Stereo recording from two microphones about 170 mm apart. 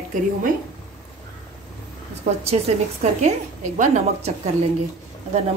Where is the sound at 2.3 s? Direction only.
50° right (ahead or behind).